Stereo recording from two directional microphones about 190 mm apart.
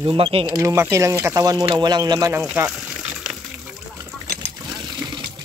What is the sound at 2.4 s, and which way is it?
Speech, 5° right (ahead or behind).